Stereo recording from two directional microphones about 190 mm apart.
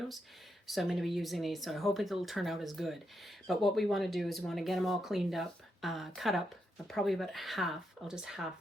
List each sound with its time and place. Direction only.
0.7 s speech: centre (ahead or behind)